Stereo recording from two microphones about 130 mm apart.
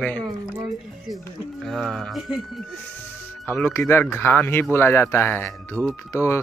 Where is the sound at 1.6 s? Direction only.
5° left (ahead or behind).